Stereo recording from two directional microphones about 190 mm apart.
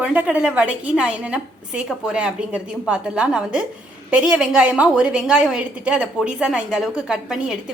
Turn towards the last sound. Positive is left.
turn(degrees=-5)  # may be behind; listen again after turning